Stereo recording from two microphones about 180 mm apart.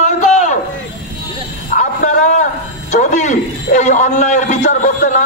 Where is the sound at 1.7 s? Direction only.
45° left (ahead or behind).